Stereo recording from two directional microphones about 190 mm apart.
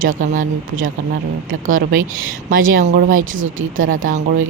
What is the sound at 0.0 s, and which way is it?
Speech, 45° right (ahead or behind).